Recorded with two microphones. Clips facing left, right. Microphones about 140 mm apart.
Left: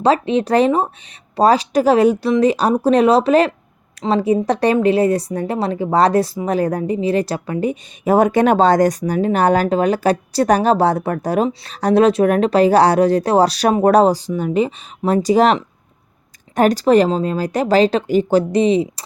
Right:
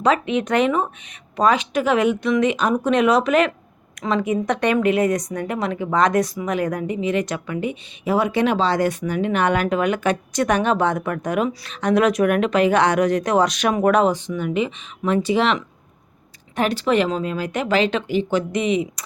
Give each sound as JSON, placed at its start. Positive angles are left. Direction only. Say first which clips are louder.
{"t": 0.0, "sound": "a woman's voice", "louder": "left 4 dB", "side_deg": 30}